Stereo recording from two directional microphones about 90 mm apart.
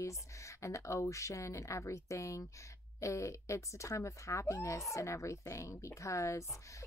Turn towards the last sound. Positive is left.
turn(degrees=35)  # may be behind; listen again after turning